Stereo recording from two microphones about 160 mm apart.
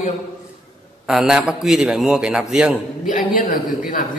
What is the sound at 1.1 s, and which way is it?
A man's voice, 5° right (ahead or behind).